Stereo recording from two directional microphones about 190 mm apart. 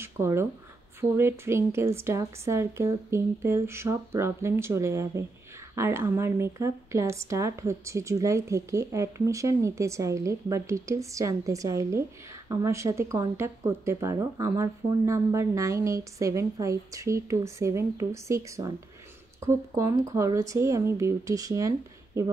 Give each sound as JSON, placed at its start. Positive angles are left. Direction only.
{"t": 0.0, "sound": "speech", "side_deg": -15}